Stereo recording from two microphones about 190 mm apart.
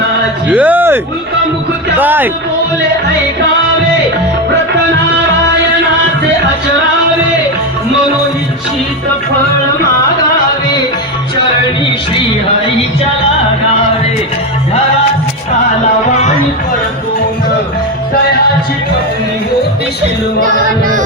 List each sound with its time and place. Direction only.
0.4 s speech: 10° right (ahead or behind)
2.0 s speech: 10° right (ahead or behind)
20.4 s music: 45° right (ahead or behind)